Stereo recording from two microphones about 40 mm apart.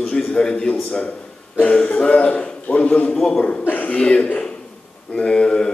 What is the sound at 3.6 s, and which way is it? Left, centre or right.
Chuckle, left.